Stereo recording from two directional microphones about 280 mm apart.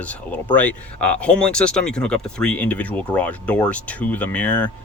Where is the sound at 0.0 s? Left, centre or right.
Centre.